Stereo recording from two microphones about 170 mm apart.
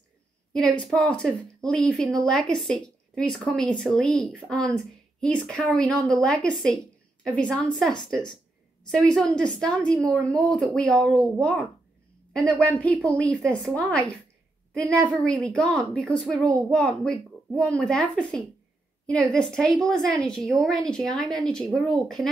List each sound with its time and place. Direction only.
0.5 s a woman's voice: 5° left (ahead or behind)
15.2 s a woman's voice: 5° left (ahead or behind)